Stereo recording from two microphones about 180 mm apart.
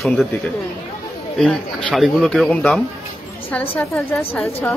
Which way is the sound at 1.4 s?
5° left (ahead or behind).